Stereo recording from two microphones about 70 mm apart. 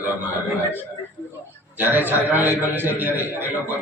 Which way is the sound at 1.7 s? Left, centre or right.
Right.